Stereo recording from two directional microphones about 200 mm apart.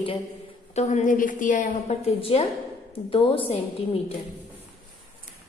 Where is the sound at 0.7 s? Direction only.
35° left (ahead or behind).